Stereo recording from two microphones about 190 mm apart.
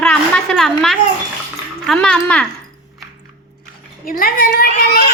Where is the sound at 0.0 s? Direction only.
5° left (ahead or behind).